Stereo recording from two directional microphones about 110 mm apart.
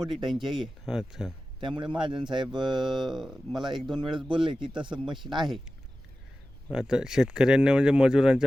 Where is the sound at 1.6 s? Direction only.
50° right (ahead or behind).